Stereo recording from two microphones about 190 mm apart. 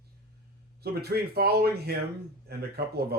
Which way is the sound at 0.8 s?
55° right (ahead or behind).